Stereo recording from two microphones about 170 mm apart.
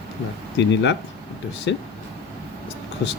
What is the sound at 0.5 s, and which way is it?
Speech, 90° left.